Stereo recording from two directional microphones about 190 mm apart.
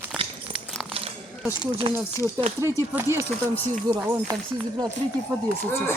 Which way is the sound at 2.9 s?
15° right (ahead or behind).